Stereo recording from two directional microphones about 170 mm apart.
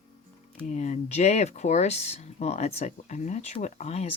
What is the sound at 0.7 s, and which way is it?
Speech, 45° left (ahead or behind).